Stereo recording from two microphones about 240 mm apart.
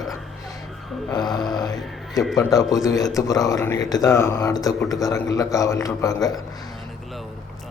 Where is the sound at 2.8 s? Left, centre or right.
Centre.